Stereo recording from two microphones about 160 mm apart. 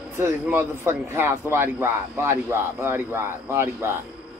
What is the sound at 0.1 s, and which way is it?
Speech, 15° right (ahead or behind).